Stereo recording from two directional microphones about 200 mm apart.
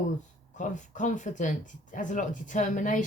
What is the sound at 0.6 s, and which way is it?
Speech, 40° left (ahead or behind).